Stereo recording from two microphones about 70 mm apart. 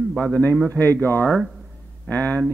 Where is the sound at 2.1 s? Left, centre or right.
Left.